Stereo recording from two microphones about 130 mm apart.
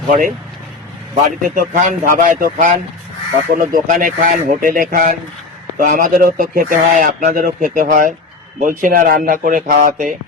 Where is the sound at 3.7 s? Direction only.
90° right.